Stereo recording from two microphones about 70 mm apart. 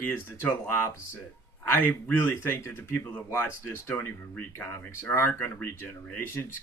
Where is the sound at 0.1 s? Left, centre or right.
Left.